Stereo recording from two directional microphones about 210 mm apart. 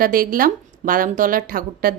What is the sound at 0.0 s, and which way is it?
A woman's voice, 45° right (ahead or behind).